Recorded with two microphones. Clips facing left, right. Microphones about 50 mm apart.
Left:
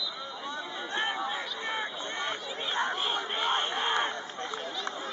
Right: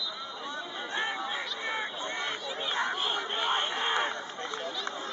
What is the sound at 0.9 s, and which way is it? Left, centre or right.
Chatter, left.